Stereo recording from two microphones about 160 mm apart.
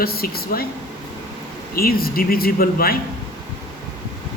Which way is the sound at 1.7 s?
70° left (ahead or behind).